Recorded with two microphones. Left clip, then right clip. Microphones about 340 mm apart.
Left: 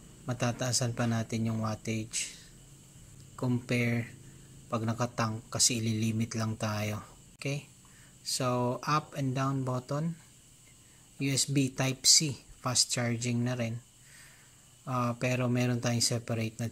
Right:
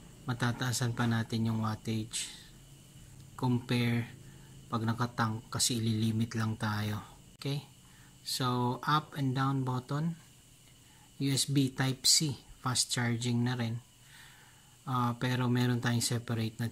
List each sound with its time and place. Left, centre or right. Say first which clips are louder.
0.3 s speech: left 3 dB; centre
11.1 s speech: left 1 dB; centre
14.9 s speech: left 2 dB; centre